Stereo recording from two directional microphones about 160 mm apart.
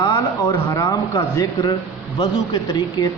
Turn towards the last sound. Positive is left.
turn(degrees=25)  # may be behind; listen again after turning